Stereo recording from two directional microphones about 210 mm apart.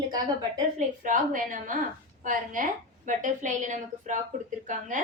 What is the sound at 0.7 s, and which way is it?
A woman's voice, 40° right (ahead or behind).